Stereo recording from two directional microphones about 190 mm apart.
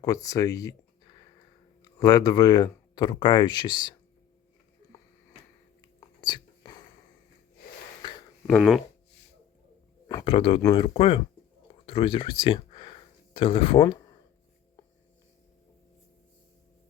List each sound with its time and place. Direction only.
0.0 s speech: 20° left (ahead or behind)
6.0 s whispering: 20° left (ahead or behind)
8.0 s a sound: 25° left (ahead or behind)
8.4 s speech: centre (ahead or behind)
10.2 s speech: 30° left (ahead or behind)